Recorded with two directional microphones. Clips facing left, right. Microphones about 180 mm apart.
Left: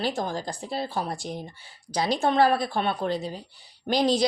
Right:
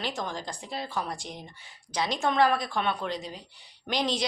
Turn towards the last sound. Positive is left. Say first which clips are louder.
# left 6 dB
turn(degrees=35)  # may be behind; listen again after turning